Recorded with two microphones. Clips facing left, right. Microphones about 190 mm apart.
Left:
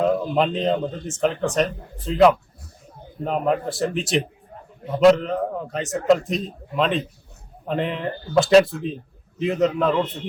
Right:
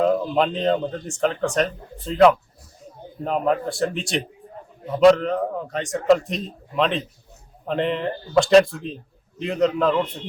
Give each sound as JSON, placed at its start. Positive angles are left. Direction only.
{"t": 0.0, "sound": "a man's voice", "side_deg": 0}